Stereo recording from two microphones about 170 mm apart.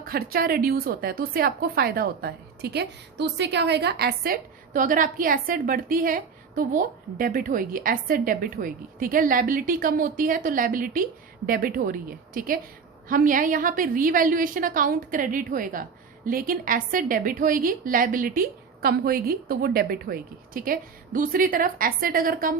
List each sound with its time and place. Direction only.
0.0 s a woman's voice: 60° right (ahead or behind)